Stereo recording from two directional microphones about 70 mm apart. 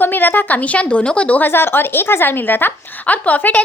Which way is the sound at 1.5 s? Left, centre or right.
Left.